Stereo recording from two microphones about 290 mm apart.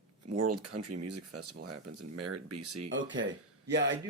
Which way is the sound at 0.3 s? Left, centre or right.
Right.